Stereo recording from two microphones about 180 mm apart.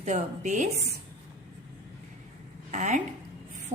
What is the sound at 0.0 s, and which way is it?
Speech, 45° right (ahead or behind).